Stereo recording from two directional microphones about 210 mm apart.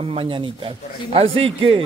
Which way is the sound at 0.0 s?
25° right (ahead or behind).